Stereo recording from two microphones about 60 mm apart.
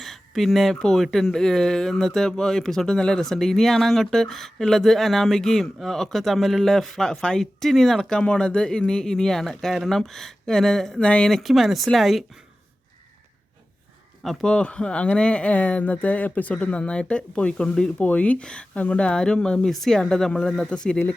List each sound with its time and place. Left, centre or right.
0.0 s speech: centre
11.3 s speech: centre
14.4 s speech: centre